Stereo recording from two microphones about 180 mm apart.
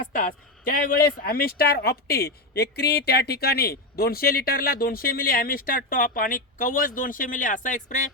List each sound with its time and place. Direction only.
0.1 s speech: 50° left (ahead or behind)